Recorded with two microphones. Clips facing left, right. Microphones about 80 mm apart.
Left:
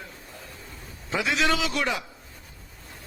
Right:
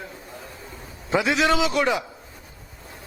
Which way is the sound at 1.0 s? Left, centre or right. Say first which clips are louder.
Right 4 dB; centre.